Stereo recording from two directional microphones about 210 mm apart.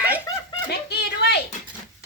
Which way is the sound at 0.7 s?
50° left (ahead or behind).